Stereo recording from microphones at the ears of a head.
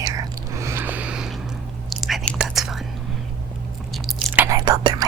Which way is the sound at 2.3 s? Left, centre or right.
Right.